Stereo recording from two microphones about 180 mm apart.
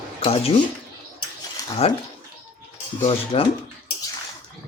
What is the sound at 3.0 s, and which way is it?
Speech, 30° left (ahead or behind).